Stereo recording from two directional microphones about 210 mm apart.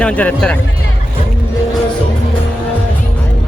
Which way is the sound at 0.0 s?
5° left (ahead or behind).